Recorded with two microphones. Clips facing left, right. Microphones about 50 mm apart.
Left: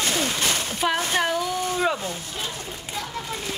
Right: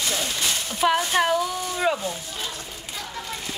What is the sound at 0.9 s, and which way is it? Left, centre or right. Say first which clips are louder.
Speech: right 2 dB; centre.